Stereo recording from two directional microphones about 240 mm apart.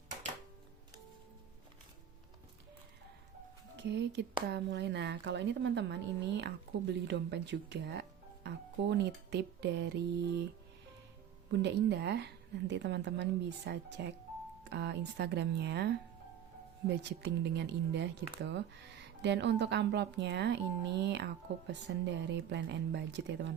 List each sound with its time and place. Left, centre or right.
3.8 s speech: right
8.4 s music: right
11.5 s speech: right